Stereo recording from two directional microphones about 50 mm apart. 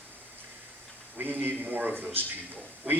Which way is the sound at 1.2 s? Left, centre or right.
Right.